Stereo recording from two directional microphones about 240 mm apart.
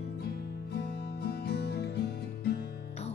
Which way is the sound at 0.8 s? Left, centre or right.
Left.